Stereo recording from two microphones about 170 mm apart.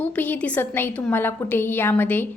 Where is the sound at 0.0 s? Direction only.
10° left (ahead or behind).